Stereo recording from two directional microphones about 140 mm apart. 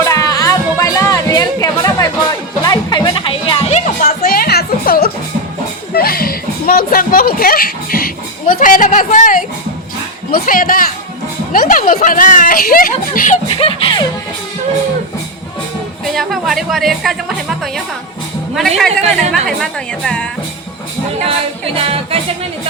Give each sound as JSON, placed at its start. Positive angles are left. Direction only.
{"t": 0.0, "sound": "music", "side_deg": 25}
{"t": 3.7, "sound": "music", "side_deg": 55}
{"t": 4.0, "sound": "music", "side_deg": 90}
{"t": 10.3, "sound": "speech", "side_deg": 85}
{"t": 13.6, "sound": "music", "side_deg": 35}
{"t": 16.1, "sound": "a woman's voice", "side_deg": 0}
{"t": 21.8, "sound": "music", "side_deg": -45}